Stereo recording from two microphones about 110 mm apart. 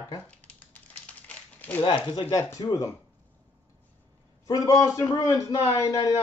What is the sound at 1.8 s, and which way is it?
Speech, 45° left (ahead or behind).